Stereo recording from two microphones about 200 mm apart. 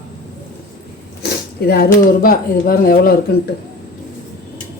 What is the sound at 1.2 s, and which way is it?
Speech, 55° left (ahead or behind).